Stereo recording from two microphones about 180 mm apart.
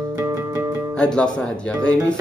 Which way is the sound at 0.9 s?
5° left (ahead or behind).